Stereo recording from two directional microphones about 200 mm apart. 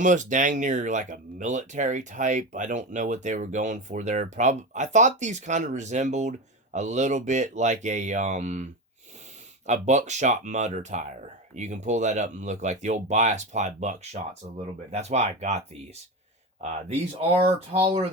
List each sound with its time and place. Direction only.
0.0 s speech: 40° right (ahead or behind)
17.2 s speech: 30° right (ahead or behind)